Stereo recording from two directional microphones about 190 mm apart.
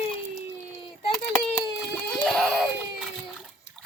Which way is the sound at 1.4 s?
5° left (ahead or behind).